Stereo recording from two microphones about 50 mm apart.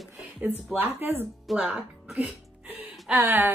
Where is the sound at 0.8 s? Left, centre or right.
Right.